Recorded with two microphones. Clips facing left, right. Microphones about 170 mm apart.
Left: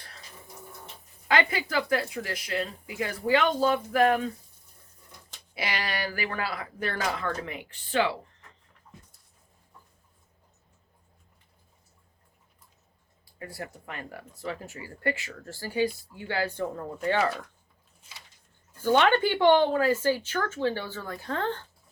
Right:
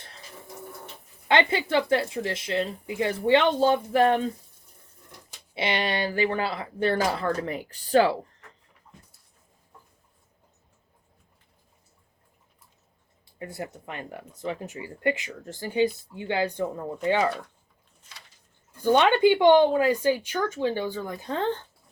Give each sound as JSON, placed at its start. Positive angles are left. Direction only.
{"t": 1.3, "sound": "speech", "side_deg": -25}
{"t": 5.5, "sound": "speech", "side_deg": -25}
{"t": 13.4, "sound": "speech", "side_deg": -20}
{"t": 18.8, "sound": "speech", "side_deg": -15}